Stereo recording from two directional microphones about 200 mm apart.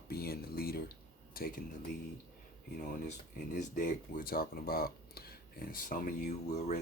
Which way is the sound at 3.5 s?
40° left (ahead or behind).